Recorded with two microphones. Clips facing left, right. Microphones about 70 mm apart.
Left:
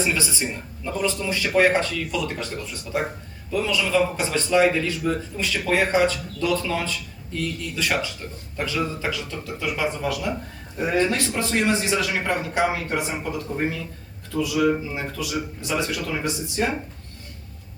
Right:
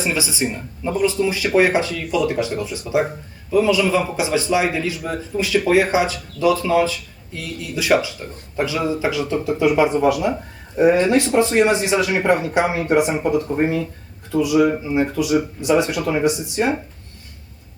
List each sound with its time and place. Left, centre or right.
0.0 s a man's voice: centre